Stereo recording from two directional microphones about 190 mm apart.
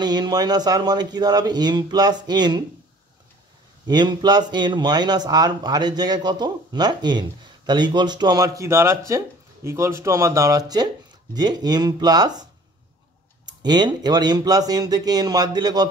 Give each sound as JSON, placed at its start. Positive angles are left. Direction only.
{"t": 0.0, "sound": "speech", "side_deg": -20}
{"t": 3.8, "sound": "speech", "side_deg": -20}
{"t": 13.5, "sound": "speech", "side_deg": -20}